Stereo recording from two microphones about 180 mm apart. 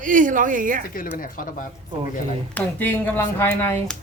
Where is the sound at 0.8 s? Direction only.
50° left (ahead or behind).